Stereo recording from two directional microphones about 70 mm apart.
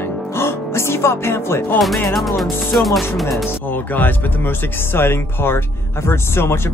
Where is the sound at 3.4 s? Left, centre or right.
Left.